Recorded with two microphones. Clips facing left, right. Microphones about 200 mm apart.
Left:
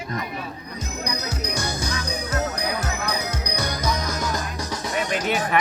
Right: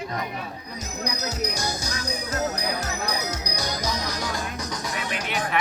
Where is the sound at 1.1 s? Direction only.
55° left (ahead or behind).